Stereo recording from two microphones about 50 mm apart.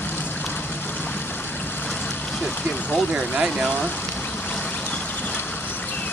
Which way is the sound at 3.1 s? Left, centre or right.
Centre.